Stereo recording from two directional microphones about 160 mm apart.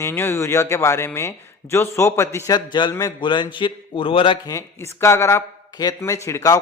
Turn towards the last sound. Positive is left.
turn(degrees=20)  # may be behind; listen again after turning